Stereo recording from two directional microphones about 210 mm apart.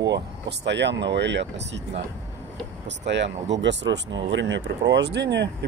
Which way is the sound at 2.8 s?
55° right (ahead or behind).